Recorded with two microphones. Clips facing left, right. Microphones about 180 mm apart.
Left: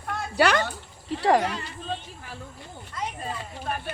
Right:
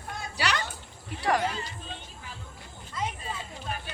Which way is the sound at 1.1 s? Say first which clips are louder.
Left 6 dB; 25° left (ahead or behind).